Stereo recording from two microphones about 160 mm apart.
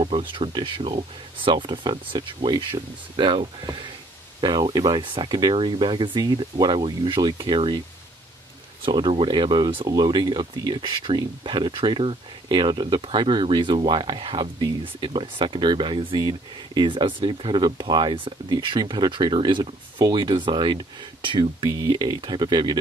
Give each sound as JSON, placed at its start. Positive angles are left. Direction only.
{"t": 0.0, "sound": "speech", "side_deg": -30}
{"t": 8.8, "sound": "speech", "side_deg": -30}